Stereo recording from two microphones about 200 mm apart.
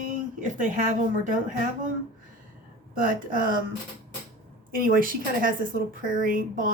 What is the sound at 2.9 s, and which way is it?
Speech, 40° right (ahead or behind).